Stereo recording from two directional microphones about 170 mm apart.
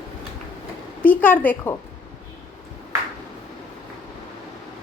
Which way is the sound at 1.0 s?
10° left (ahead or behind).